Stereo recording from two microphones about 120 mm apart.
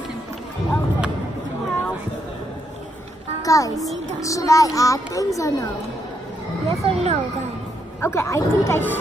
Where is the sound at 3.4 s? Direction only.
30° left (ahead or behind).